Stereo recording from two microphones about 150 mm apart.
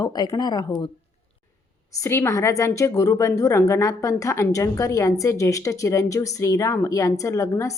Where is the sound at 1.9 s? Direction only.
20° left (ahead or behind).